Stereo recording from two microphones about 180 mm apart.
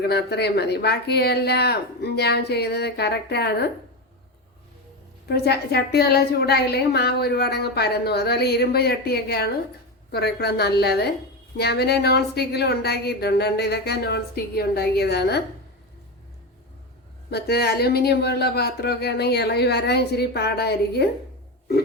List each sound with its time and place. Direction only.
0.0 s a woman's voice: 65° left (ahead or behind)
5.3 s a woman's voice: 65° left (ahead or behind)
17.3 s a woman's voice: 65° left (ahead or behind)